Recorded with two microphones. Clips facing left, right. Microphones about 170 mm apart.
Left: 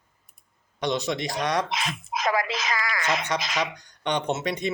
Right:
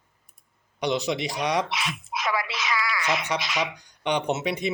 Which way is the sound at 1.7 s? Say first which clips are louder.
Left 1 dB; 45° left (ahead or behind).